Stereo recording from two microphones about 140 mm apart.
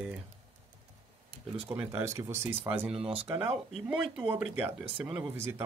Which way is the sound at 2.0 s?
20° right (ahead or behind).